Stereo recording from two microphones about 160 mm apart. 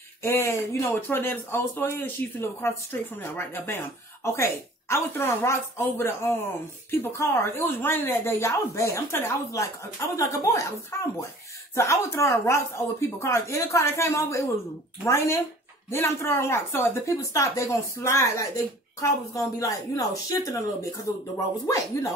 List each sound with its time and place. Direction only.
0.2 s speech: 15° left (ahead or behind)
21.6 s speech: 20° left (ahead or behind)